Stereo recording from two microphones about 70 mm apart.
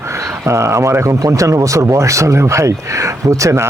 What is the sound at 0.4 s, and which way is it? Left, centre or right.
Speech, right.